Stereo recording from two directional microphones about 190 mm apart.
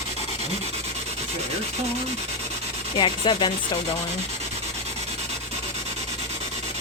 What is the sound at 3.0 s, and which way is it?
Rub, 25° left (ahead or behind).